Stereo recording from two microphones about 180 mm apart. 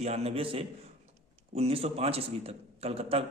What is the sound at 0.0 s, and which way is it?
A man's voice, 35° right (ahead or behind).